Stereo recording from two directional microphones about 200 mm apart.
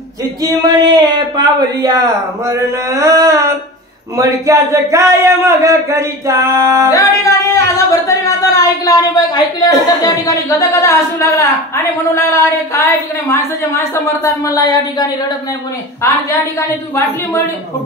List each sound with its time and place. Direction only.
0.4 s a man's voice: 20° right (ahead or behind)
6.9 s speech: 15° left (ahead or behind)